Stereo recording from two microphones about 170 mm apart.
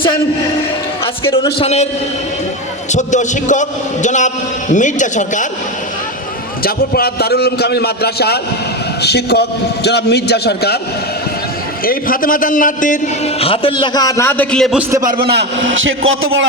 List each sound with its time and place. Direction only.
1.5 s a man's voice: 40° left (ahead or behind)
2.9 s a man's voice: 45° left (ahead or behind)
6.6 s a man's voice: 60° left (ahead or behind)
11.9 s a man's voice: 55° left (ahead or behind)
13.4 s a man's voice: 35° left (ahead or behind); by 14.8 s 5° left (ahead or behind)
14.8 s a man's voice: 15° right (ahead or behind)
15.0 s a man's voice: 65° right (ahead or behind); by 15.8 s 85° right